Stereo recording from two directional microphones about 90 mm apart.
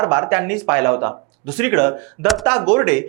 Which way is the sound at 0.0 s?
20° right (ahead or behind).